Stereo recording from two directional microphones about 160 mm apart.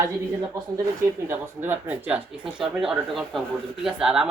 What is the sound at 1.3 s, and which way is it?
Speech, 15° right (ahead or behind).